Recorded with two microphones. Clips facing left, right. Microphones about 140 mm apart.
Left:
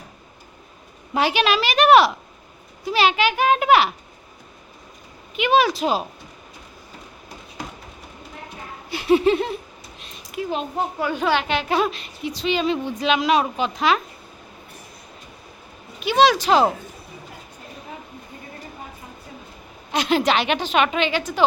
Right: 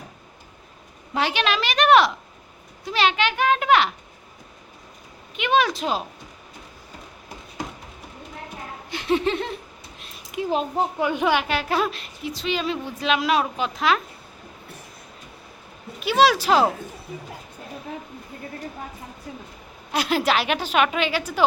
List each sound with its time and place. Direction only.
1.1 s a woman's voice: 10° left (ahead or behind)
5.4 s a woman's voice: 5° left (ahead or behind)
8.9 s a sound: 10° left (ahead or behind)
10.4 s a child's voice: 25° right (ahead or behind); by 14.0 s centre (ahead or behind)
16.0 s a woman's voice: 5° right (ahead or behind)
19.9 s a woman's voice: 5° right (ahead or behind)